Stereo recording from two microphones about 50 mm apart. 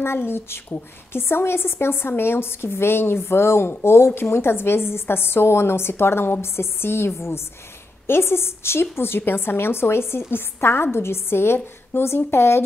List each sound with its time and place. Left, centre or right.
0.0 s a woman's voice: left